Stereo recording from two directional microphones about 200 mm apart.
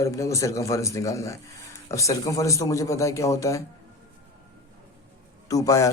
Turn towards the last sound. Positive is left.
turn(degrees=15)  # may be behind; listen again after turning